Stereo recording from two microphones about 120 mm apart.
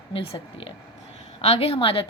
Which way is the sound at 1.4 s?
55° left (ahead or behind).